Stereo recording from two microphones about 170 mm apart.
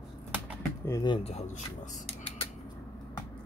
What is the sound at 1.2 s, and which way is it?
Speech, 40° left (ahead or behind).